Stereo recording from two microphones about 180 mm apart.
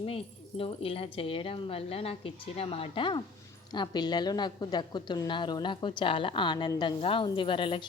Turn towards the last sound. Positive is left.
turn(degrees=30)  # may be behind; listen again after turning